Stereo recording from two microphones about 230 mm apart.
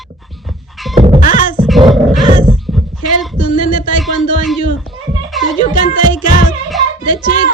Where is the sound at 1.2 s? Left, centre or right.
Left.